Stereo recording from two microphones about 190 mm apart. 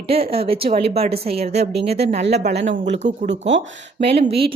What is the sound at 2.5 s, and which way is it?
Speech, 65° right (ahead or behind).